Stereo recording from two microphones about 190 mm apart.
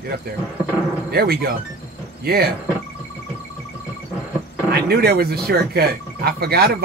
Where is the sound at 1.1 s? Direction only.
55° right (ahead or behind).